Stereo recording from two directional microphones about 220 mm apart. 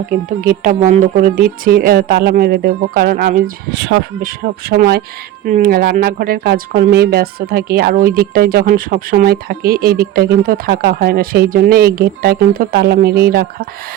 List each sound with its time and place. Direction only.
0.3 s speech: 35° right (ahead or behind)